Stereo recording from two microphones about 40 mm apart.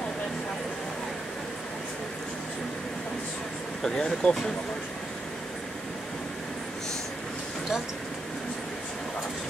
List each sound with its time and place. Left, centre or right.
3.8 s speech: left